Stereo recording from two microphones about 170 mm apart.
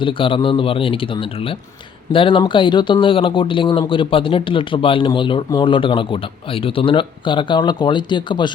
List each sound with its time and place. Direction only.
0.0 s speech: 30° left (ahead or behind)